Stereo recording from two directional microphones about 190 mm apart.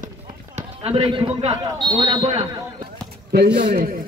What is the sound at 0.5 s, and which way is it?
A man's voice, 30° right (ahead or behind).